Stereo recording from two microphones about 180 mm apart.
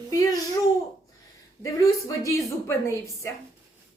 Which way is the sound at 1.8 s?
20° left (ahead or behind).